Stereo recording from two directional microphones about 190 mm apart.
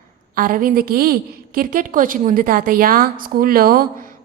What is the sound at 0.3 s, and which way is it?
A woman's voice, 50° right (ahead or behind).